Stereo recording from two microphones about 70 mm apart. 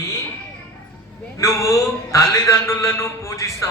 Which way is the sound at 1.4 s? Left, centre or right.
Left.